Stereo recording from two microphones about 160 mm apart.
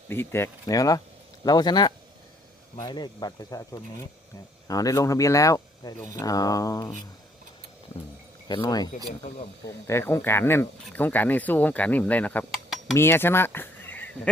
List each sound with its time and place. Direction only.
0.1 s speech: 15° left (ahead or behind)
8.4 s speech: 25° left (ahead or behind)